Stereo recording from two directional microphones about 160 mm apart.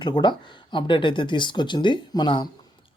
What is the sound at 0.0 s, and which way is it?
Speech, 30° left (ahead or behind).